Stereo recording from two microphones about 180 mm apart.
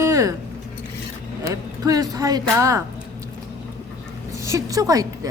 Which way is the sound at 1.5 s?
20° right (ahead or behind).